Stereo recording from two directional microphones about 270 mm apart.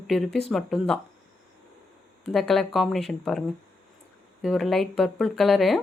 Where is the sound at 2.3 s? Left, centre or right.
Centre.